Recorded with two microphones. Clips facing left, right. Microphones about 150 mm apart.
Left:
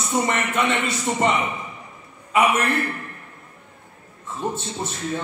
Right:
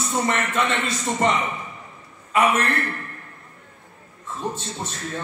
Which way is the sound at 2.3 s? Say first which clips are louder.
Left 1 dB; 10° left (ahead or behind).